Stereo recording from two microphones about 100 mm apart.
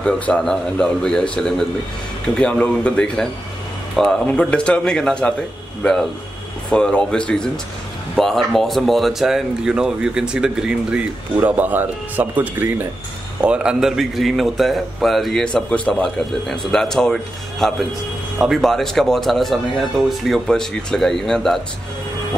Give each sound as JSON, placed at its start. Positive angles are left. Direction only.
{"t": 0.0, "sound": "a man's voice", "side_deg": 10}
{"t": 11.4, "sound": "speech", "side_deg": -20}
{"t": 13.4, "sound": "a man's voice", "side_deg": -10}